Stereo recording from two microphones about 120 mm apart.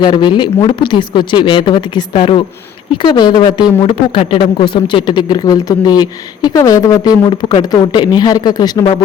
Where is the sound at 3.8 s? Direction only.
50° left (ahead or behind); by 7.1 s 30° left (ahead or behind).